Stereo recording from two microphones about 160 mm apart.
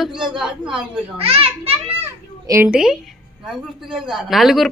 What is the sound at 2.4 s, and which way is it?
Speech, 20° right (ahead or behind).